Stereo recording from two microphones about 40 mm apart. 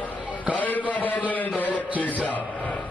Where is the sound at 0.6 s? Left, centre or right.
Left.